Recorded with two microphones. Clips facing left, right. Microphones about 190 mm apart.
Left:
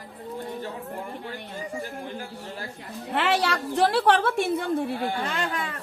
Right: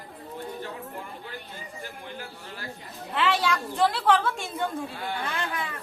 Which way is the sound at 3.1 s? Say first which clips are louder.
Left 1 dB; 60° left (ahead or behind).